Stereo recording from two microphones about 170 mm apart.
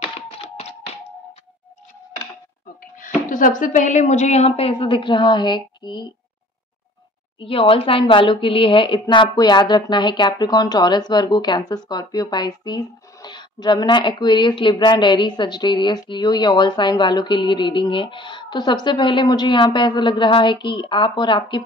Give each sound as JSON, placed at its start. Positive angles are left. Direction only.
{"t": 3.3, "sound": "a woman's voice", "side_deg": 50}
{"t": 7.3, "sound": "a woman's voice", "side_deg": 30}